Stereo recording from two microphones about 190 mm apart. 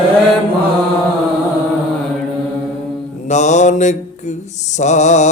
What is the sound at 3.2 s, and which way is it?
Mantra, 40° left (ahead or behind).